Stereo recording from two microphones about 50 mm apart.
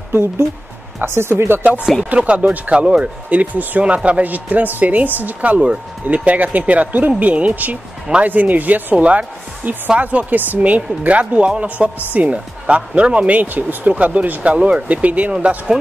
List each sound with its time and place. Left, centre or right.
0.1 s speech: right
1.6 s speech: right
2.7 s speech: right
8.9 s speech: right
15.3 s speech: centre